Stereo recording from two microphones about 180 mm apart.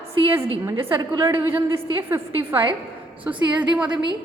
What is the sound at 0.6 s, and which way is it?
A woman's voice, 15° right (ahead or behind).